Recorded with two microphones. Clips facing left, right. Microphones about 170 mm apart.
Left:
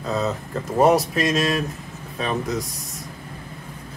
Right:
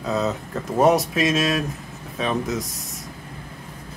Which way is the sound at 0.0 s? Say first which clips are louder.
Right 1 dB; centre (ahead or behind).